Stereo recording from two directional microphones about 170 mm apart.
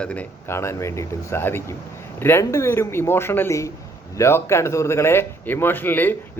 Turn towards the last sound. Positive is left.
turn(degrees=10)  # may be behind; listen again after turning